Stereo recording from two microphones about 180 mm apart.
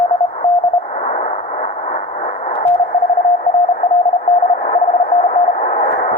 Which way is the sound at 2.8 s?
50° left (ahead or behind).